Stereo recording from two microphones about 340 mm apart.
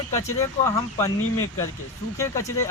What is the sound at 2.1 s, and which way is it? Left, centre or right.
Speech, centre.